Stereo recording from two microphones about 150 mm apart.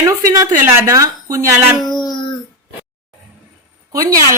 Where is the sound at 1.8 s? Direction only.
30° left (ahead or behind).